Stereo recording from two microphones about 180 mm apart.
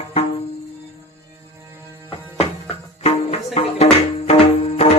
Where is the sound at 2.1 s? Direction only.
30° left (ahead or behind).